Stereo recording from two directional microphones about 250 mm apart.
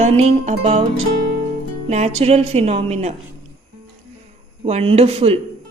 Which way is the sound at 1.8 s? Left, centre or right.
Right.